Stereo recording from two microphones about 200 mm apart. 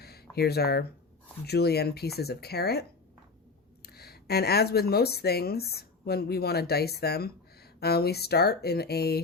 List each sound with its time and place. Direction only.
0.0 s a sound: 50° left (ahead or behind)
1.5 s speech: 55° left (ahead or behind)
3.8 s speech: 50° left (ahead or behind)